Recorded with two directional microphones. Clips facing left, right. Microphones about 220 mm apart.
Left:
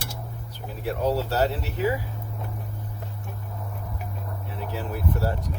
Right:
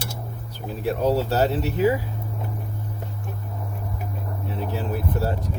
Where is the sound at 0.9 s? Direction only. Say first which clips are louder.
Right 4 dB; 25° right (ahead or behind).